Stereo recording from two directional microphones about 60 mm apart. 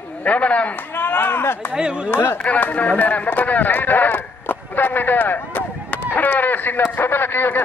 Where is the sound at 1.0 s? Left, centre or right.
Left.